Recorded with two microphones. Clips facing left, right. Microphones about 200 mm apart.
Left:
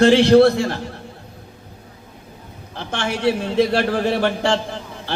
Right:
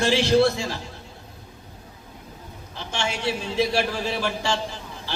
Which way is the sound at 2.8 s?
60° left (ahead or behind).